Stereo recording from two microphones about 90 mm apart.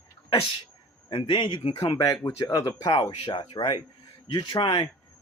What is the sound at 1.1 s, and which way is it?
Speech, 60° left (ahead or behind).